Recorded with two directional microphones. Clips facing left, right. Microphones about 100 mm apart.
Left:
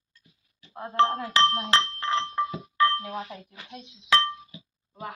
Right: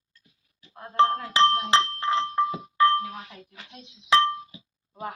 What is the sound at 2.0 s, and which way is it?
Glass, 10° right (ahead or behind).